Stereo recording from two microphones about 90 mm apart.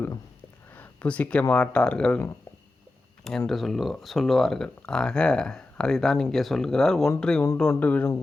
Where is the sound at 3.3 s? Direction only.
Centre (ahead or behind).